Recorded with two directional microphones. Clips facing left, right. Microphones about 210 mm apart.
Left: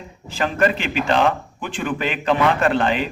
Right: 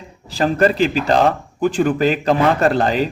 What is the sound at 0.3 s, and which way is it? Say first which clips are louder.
A man's voice: right 4 dB; 35° right (ahead or behind).